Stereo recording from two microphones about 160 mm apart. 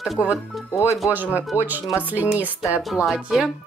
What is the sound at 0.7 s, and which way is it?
Speech, 15° left (ahead or behind).